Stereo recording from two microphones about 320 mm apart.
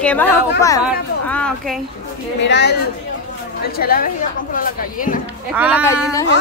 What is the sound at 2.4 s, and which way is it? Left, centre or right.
Speech, left.